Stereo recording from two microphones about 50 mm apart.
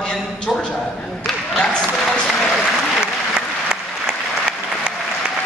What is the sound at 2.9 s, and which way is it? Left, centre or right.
Applause, centre.